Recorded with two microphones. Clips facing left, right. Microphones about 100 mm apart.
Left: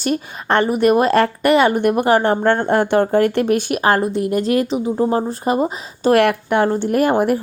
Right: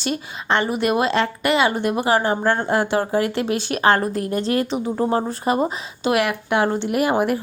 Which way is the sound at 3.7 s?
35° right (ahead or behind).